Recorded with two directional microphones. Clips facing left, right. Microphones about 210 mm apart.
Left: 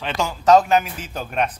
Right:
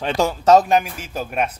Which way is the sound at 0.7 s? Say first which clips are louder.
Right 1 dB; 10° right (ahead or behind).